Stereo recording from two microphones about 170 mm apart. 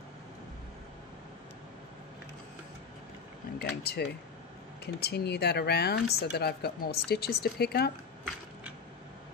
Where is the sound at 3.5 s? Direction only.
70° left (ahead or behind).